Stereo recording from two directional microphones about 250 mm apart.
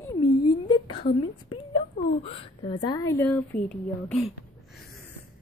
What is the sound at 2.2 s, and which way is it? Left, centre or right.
A woman's voice, left.